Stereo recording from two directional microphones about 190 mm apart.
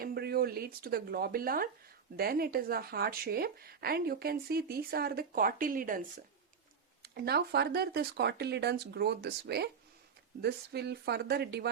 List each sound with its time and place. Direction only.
0.0 s speech: 55° right (ahead or behind)
7.0 s speech: 55° right (ahead or behind)